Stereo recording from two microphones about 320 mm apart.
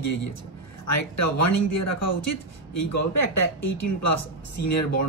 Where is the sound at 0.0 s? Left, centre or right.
Left.